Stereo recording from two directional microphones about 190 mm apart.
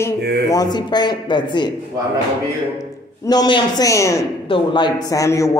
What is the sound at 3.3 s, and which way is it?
Speech, 20° left (ahead or behind).